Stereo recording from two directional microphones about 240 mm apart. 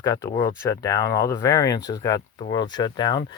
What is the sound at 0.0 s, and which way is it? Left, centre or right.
Speech, centre.